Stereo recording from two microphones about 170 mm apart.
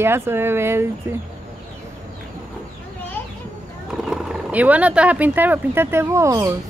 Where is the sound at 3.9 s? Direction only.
Centre (ahead or behind); by 6.5 s 20° right (ahead or behind).